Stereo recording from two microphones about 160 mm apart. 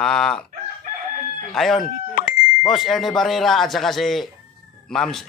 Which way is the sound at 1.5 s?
Centre (ahead or behind).